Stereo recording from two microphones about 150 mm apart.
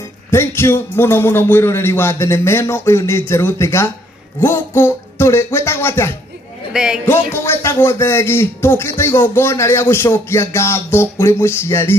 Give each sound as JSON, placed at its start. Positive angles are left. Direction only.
{"t": 0.3, "sound": "speech", "side_deg": 15}
{"t": 6.7, "sound": "a man's voice", "side_deg": -5}
{"t": 7.3, "sound": "speech", "side_deg": 15}